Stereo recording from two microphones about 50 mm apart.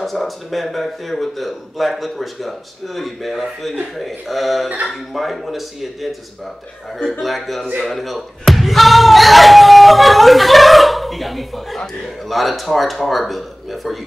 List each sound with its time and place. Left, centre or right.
0.0 s speech: centre